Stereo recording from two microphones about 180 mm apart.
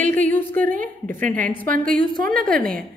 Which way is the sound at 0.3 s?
10° left (ahead or behind).